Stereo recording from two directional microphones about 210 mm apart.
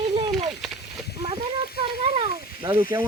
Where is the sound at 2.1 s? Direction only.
25° right (ahead or behind).